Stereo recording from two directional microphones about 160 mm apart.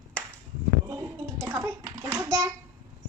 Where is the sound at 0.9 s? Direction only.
20° right (ahead or behind).